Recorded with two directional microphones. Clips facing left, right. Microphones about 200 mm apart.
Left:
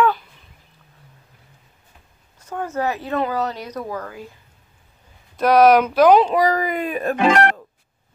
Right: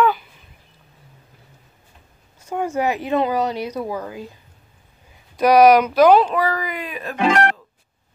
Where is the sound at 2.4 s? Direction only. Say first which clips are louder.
Right 2 dB; 10° right (ahead or behind).